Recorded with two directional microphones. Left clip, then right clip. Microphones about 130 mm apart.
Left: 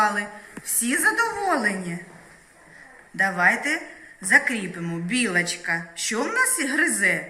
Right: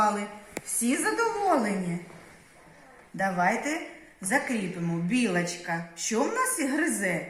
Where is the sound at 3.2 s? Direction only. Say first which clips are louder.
Left 6 dB; 45° right (ahead or behind).